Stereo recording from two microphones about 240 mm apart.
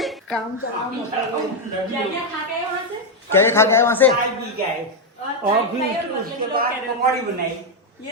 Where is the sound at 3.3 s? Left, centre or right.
Centre.